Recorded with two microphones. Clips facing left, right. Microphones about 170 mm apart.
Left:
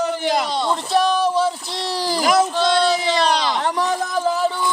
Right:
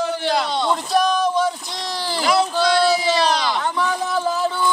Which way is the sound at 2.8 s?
5° right (ahead or behind).